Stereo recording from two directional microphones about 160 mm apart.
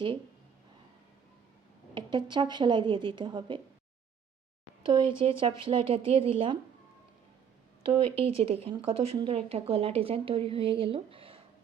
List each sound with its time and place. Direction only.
2.0 s speech: 30° right (ahead or behind)
4.9 s speech: 30° right (ahead or behind)
7.9 s speech: 35° right (ahead or behind)